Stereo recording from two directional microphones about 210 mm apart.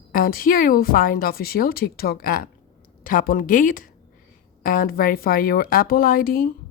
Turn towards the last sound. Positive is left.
turn(degrees=45)  # may be behind; listen again after turning